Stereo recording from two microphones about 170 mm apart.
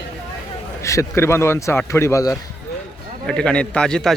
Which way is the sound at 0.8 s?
15° left (ahead or behind).